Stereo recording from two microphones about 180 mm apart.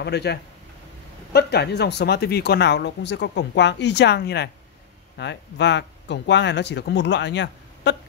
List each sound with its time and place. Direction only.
0.0 s speech: 65° left (ahead or behind)